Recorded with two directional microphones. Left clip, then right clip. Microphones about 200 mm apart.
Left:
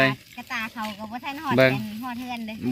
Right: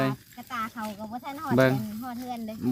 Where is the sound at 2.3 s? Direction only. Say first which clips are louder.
Left 3 dB; 55° right (ahead or behind).